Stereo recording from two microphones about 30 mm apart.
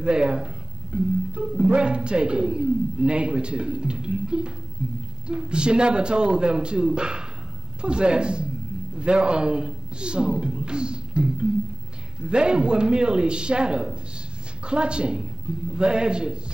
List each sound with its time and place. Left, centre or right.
0.0 s speech: right